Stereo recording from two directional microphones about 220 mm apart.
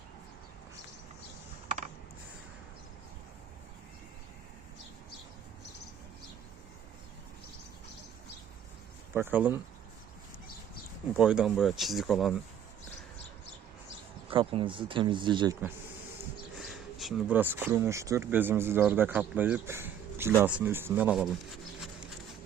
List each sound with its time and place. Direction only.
9.1 s speech: 10° right (ahead or behind)
11.2 s speech: 5° right (ahead or behind)
14.3 s speech: 25° right (ahead or behind)
16.6 s speech: centre (ahead or behind)